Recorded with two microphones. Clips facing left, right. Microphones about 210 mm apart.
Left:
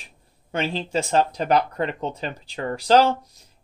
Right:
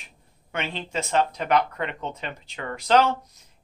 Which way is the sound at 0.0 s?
35° left (ahead or behind).